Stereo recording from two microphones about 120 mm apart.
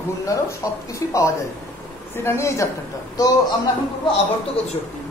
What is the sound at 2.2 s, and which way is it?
Speech, 25° left (ahead or behind).